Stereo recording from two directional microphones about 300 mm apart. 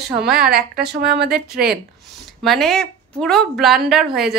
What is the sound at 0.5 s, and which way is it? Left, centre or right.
A woman's voice, right.